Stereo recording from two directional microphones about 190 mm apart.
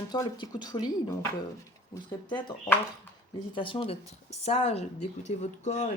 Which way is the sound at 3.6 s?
25° left (ahead or behind).